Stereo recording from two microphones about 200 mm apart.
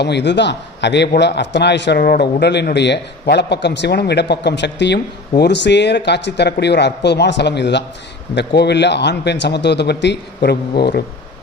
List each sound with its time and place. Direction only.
0.0 s a man's voice: 60° left (ahead or behind)